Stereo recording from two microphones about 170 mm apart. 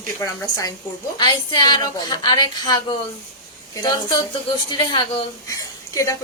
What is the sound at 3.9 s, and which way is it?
Speech, 25° left (ahead or behind).